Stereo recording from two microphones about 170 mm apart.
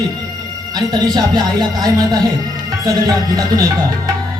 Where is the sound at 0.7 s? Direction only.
25° right (ahead or behind).